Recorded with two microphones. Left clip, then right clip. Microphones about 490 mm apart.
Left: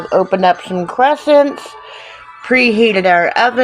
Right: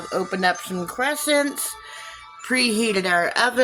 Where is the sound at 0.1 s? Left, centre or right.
Right.